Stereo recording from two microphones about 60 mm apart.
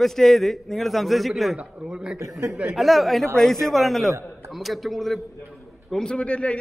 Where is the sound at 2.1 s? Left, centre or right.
Right.